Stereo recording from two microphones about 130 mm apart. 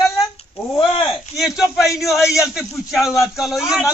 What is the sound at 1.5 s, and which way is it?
Speech, centre (ahead or behind).